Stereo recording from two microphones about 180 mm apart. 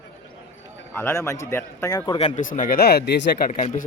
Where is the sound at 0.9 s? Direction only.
15° left (ahead or behind).